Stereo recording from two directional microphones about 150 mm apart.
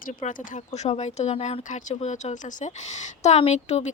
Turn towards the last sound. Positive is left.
turn(degrees=50)  # may be behind; listen again after turning